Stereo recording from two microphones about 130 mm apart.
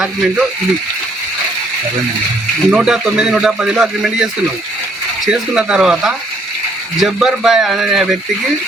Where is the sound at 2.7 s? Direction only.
5° right (ahead or behind).